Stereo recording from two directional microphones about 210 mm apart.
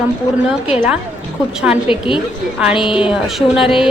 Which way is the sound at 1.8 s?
25° left (ahead or behind).